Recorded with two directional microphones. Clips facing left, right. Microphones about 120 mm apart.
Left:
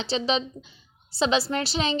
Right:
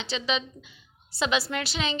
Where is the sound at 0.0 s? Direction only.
35° left (ahead or behind).